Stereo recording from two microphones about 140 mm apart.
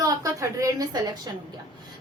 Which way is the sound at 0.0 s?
25° right (ahead or behind).